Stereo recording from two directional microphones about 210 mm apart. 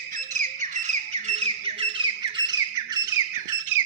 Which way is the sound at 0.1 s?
40° right (ahead or behind).